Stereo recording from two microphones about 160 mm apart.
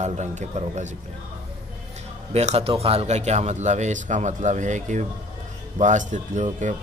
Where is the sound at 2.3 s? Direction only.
45° right (ahead or behind).